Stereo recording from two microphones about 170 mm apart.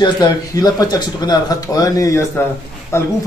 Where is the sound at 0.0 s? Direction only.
20° left (ahead or behind).